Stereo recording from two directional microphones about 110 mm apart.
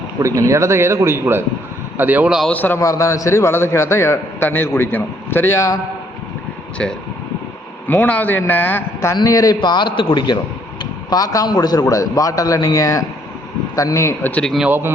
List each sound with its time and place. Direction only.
0.2 s a man's voice: 30° right (ahead or behind)
2.5 s speech: 15° left (ahead or behind)
2.7 s a man's voice: 30° left (ahead or behind)
7.9 s speech: 15° left (ahead or behind)
9.1 s a man's voice: 30° left (ahead or behind)
11.1 s a man's voice: 35° left (ahead or behind)
14.6 s a man's voice: 20° right (ahead or behind)